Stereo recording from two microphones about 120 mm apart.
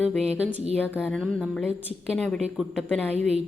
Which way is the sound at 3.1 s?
65° right (ahead or behind).